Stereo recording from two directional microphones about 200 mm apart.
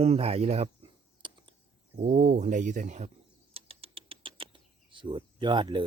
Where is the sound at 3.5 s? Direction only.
30° right (ahead or behind).